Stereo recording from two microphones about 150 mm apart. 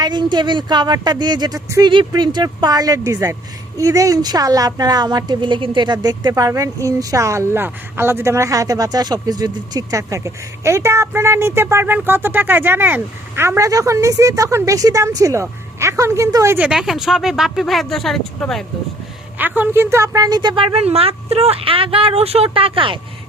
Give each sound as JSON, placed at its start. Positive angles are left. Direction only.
{"t": 0.0, "sound": "a woman's voice", "side_deg": -30}
{"t": 16.6, "sound": "speech", "side_deg": -5}
{"t": 19.4, "sound": "a woman's voice", "side_deg": -15}
{"t": 20.7, "sound": "speech", "side_deg": -40}